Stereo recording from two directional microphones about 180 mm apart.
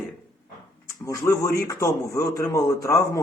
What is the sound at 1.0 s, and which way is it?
A man's voice, 15° left (ahead or behind).